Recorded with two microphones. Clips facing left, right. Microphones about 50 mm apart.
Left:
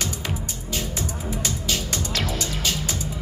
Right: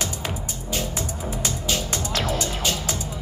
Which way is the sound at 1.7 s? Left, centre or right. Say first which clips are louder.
Right 2 dB; right.